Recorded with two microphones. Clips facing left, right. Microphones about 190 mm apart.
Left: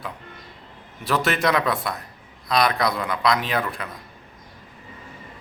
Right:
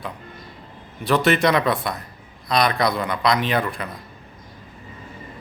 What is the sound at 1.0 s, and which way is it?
A man's voice, centre (ahead or behind).